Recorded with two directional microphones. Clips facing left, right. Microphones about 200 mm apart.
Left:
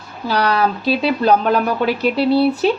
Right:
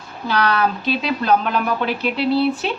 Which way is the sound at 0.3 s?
35° left (ahead or behind).